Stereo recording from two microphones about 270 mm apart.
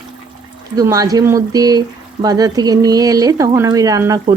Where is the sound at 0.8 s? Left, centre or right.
Centre.